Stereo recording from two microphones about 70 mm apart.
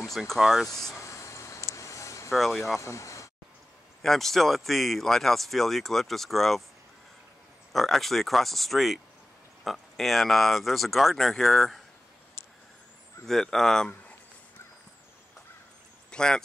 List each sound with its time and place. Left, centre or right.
0.4 s speech: centre
0.9 s vehicle: left
2.3 s speech: centre
2.8 s speech: left
4.0 s speech: centre
7.7 s speech: centre
13.3 s speech: centre
16.1 s speech: centre